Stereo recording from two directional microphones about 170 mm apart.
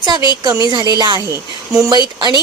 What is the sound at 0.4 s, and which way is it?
Speech, 20° right (ahead or behind).